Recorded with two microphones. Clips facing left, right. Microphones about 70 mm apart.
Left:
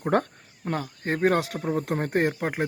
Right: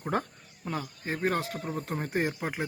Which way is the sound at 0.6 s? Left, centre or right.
Left.